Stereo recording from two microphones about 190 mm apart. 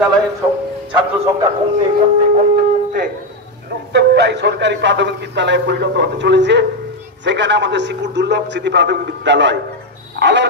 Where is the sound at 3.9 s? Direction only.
65° right (ahead or behind).